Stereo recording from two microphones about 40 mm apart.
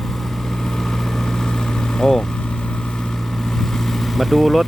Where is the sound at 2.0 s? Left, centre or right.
Centre.